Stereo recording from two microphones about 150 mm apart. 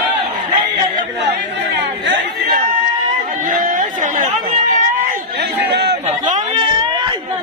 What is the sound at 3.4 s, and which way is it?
Chatter, 60° right (ahead or behind).